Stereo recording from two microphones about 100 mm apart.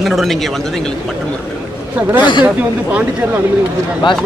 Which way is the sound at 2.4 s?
15° right (ahead or behind).